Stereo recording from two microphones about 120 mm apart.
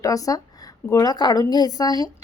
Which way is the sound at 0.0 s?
30° left (ahead or behind).